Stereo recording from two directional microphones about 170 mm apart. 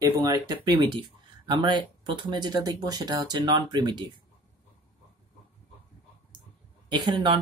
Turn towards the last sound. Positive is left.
turn(degrees=-25)  # may be behind; listen again after turning